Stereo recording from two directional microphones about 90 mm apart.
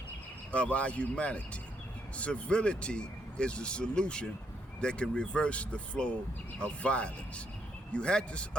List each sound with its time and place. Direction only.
0.5 s speech: 15° left (ahead or behind)